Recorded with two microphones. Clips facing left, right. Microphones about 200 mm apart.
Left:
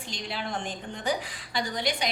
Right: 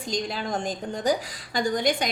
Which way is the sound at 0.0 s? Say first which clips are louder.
Right 6 dB; 40° right (ahead or behind).